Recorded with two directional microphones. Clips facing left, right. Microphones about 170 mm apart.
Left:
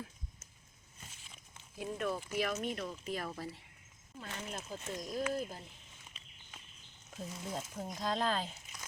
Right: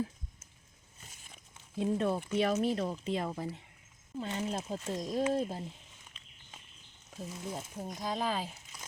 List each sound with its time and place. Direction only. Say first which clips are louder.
1.7 s speech: right 7 dB; 25° right (ahead or behind)
7.2 s speech: right 1 dB; 5° right (ahead or behind)